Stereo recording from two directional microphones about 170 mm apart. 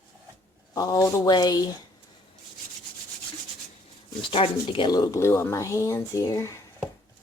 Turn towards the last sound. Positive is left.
turn(degrees=20)  # may be behind; listen again after turning